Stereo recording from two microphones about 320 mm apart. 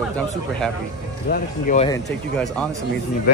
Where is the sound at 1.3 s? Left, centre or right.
Left.